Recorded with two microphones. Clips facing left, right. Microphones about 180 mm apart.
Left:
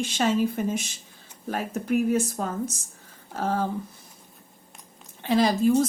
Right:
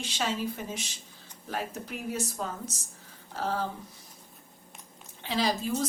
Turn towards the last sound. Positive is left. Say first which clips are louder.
# left 9 dB
turn(degrees=50)  # may be behind; listen again after turning